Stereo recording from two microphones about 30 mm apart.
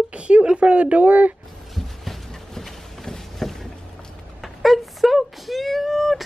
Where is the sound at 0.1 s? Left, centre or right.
Right.